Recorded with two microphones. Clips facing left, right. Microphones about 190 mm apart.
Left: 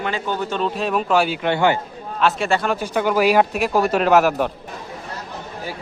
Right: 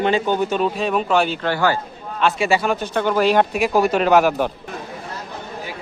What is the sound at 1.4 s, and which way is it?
Speech, 20° left (ahead or behind).